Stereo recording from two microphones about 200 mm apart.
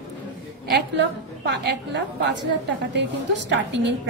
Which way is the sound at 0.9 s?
60° right (ahead or behind).